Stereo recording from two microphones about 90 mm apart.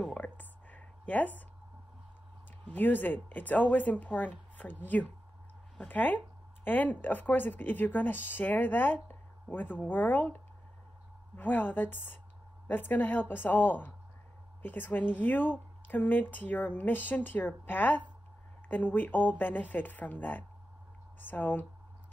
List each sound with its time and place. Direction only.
0.0 s a sound: 15° left (ahead or behind)
2.7 s speech: 20° left (ahead or behind)
5.8 s speech: 20° left (ahead or behind)